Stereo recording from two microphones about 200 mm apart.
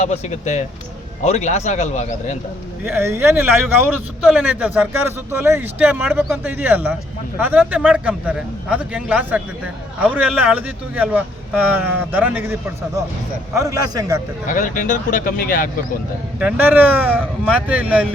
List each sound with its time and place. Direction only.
0.0 s a man's voice: 35° left (ahead or behind)
2.8 s a man's voice: 10° right (ahead or behind)
13.6 s speech: 15° right (ahead or behind)
14.4 s speech: 40° left (ahead or behind)
16.4 s speech: 10° right (ahead or behind)